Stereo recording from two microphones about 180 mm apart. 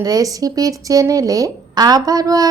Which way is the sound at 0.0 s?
20° right (ahead or behind).